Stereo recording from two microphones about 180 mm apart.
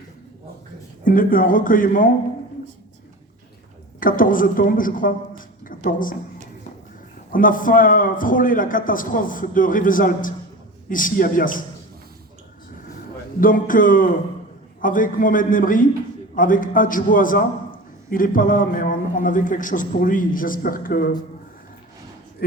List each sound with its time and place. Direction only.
1.0 s a man's voice: 50° left (ahead or behind)
4.0 s a man's voice: 50° left (ahead or behind)
5.4 s a sound: 50° left (ahead or behind)
7.3 s a man's voice: 50° left (ahead or behind)
13.4 s a man's voice: 50° left (ahead or behind)